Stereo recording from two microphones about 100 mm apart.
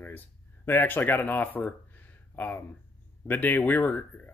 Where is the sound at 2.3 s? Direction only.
20° left (ahead or behind).